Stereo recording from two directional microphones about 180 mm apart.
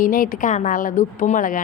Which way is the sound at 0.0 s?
50° left (ahead or behind).